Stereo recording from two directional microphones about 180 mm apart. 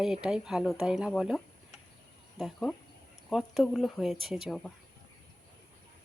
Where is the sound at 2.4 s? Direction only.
5° left (ahead or behind).